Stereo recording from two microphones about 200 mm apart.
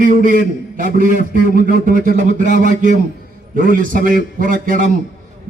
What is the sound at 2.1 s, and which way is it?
Speech, 40° right (ahead or behind).